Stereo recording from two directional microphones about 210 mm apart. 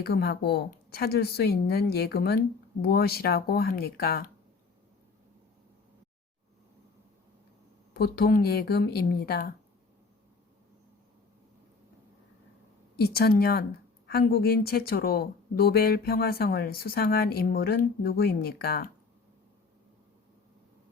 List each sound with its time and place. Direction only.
0.0 s a woman's voice: 50° left (ahead or behind)
7.9 s a woman's voice: 45° left (ahead or behind)
13.0 s a woman's voice: 45° left (ahead or behind)